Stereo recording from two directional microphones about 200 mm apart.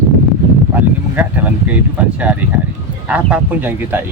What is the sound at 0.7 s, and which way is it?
Speech, 10° right (ahead or behind).